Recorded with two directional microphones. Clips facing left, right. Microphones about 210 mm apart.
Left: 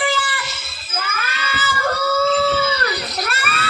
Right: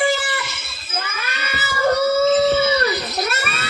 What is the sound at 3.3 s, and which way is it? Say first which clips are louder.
Music: even; 20° right (ahead or behind).